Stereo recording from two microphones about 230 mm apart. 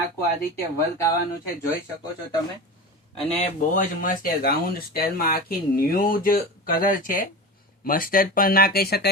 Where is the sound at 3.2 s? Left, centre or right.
Left.